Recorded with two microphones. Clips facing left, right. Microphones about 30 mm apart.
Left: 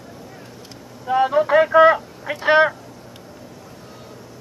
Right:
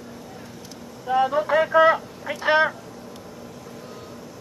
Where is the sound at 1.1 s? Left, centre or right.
Left.